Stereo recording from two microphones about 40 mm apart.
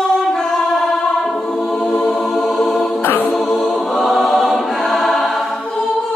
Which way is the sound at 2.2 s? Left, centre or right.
Centre.